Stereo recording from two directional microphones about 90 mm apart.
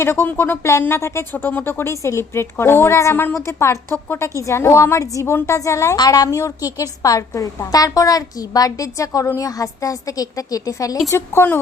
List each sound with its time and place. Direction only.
0.0 s speech: 25° left (ahead or behind)
6.0 s a woman's voice: 45° left (ahead or behind)
6.2 s a woman's voice: 35° left (ahead or behind)
11.1 s speech: 25° left (ahead or behind)